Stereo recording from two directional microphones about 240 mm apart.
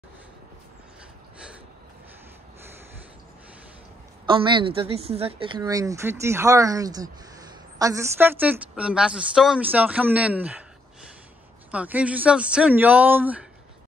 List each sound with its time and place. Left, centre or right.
4.3 s a woman's voice: centre
11.7 s speech: centre